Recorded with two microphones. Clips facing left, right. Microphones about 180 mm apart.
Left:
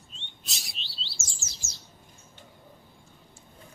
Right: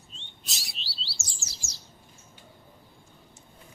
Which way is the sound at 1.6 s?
20° left (ahead or behind).